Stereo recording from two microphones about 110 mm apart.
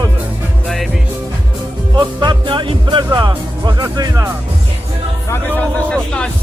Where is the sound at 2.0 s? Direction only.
40° right (ahead or behind).